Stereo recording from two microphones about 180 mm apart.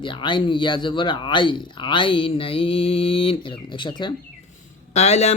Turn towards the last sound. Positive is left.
turn(degrees=40)  # may be behind; listen again after turning